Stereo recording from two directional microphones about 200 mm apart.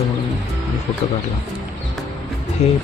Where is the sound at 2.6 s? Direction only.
30° left (ahead or behind).